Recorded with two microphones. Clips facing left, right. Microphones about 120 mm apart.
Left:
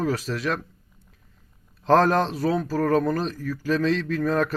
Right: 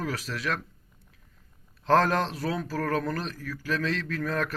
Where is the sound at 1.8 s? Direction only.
15° left (ahead or behind).